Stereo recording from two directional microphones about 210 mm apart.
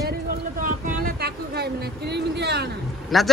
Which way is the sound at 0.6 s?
40° right (ahead or behind).